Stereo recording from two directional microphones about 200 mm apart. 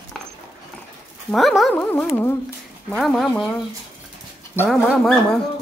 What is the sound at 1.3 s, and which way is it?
Speech, centre (ahead or behind).